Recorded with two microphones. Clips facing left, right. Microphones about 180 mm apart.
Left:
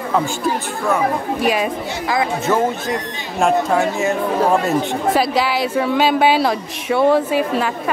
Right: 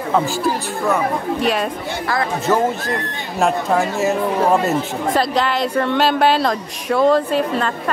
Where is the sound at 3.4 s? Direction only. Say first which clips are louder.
Left 1 dB; centre (ahead or behind).